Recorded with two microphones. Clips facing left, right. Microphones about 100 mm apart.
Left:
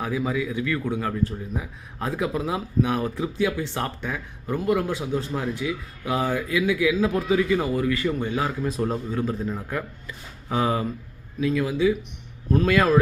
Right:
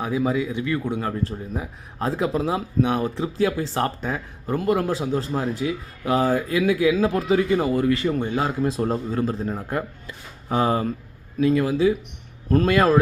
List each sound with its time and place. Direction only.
0.0 s speech: 25° right (ahead or behind)